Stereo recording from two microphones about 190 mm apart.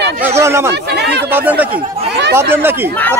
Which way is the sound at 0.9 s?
60° right (ahead or behind).